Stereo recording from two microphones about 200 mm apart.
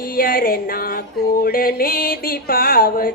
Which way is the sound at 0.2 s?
45° left (ahead or behind).